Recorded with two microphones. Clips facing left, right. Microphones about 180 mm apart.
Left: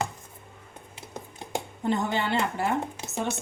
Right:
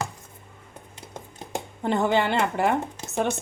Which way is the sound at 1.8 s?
65° right (ahead or behind).